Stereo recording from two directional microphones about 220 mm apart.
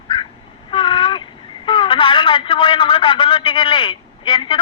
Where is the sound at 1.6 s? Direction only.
20° left (ahead or behind).